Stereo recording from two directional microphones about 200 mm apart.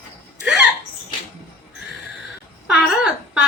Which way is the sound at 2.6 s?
5° right (ahead or behind).